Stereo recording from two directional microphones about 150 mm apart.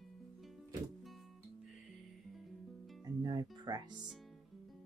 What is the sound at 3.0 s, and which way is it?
Music, 25° right (ahead or behind).